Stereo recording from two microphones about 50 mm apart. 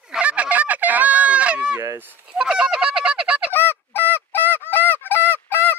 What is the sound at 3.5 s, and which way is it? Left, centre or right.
Goose, left.